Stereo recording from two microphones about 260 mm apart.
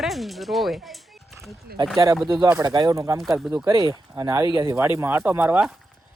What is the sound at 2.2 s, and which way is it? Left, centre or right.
Speech, centre.